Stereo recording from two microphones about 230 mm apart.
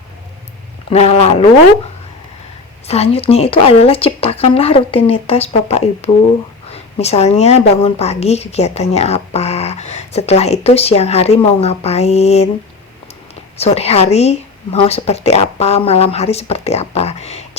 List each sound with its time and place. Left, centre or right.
0.9 s speech: left
2.8 s speech: left
13.6 s speech: left